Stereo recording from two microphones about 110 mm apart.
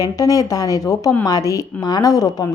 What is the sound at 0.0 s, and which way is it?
A woman's voice, 30° left (ahead or behind).